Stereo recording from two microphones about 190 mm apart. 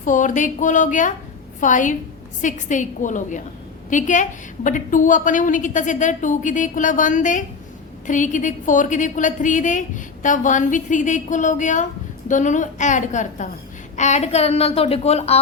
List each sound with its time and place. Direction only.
0.0 s a woman's voice: 40° left (ahead or behind)